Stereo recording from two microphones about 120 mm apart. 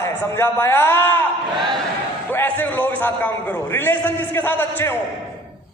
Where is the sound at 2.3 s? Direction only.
15° left (ahead or behind).